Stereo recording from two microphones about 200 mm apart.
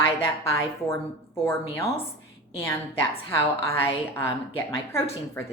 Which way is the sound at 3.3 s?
15° left (ahead or behind).